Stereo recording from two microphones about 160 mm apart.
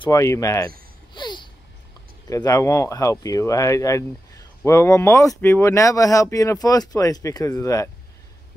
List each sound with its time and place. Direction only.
0.0 s speech: 20° left (ahead or behind)
1.1 s a sound: 30° left (ahead or behind)
2.2 s speech: 20° left (ahead or behind)